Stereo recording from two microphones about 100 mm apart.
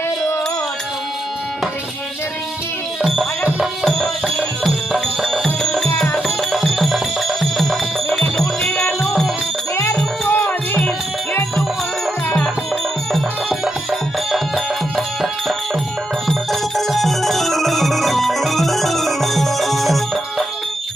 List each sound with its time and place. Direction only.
3.6 s music: centre (ahead or behind)
10.2 s music: 15° left (ahead or behind)
14.3 s music: centre (ahead or behind)